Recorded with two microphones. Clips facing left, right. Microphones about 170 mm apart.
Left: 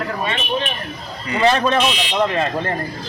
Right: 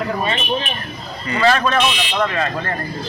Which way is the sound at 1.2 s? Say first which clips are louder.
Even; 20° left (ahead or behind).